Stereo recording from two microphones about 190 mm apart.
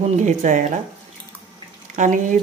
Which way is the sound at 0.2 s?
40° right (ahead or behind).